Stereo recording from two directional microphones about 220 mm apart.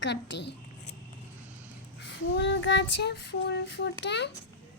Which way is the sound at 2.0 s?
55° left (ahead or behind).